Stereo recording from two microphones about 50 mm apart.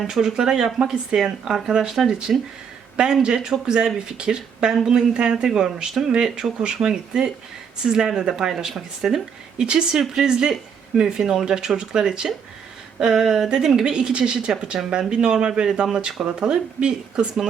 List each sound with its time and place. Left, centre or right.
0.1 s speech: centre